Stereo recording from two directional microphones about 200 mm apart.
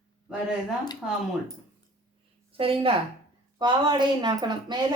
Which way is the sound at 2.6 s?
25° right (ahead or behind).